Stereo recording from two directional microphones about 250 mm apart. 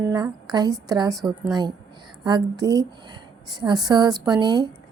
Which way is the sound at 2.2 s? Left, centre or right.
Centre.